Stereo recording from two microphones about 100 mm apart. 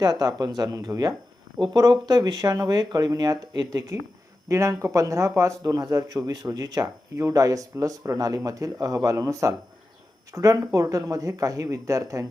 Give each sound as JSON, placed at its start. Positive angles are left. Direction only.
{"t": 0.0, "sound": "speech", "side_deg": -40}